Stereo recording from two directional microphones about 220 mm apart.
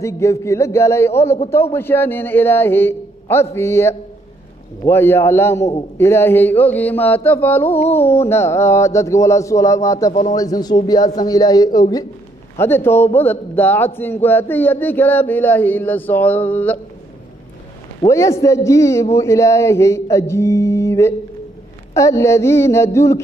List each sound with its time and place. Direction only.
0.0 s speech: 15° left (ahead or behind)
18.1 s speech: 15° left (ahead or behind)